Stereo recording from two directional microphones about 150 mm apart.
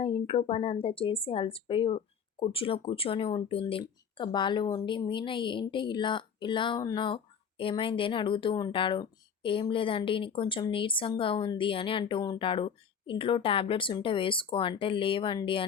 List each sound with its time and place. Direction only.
0.0 s speech: 40° left (ahead or behind)